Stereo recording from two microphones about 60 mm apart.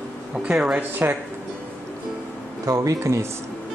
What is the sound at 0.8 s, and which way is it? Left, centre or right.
Speech, right.